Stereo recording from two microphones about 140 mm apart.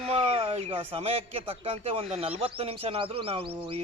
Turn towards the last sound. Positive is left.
turn(degrees=-40)  # may be behind; listen again after turning